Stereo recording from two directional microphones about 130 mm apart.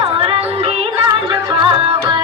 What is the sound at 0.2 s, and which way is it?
Music, 45° right (ahead or behind).